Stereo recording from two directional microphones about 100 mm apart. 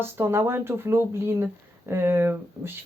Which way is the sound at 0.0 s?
25° right (ahead or behind).